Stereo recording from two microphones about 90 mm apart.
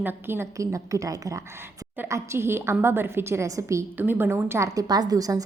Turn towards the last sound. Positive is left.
turn(degrees=-40)  # may be behind; listen again after turning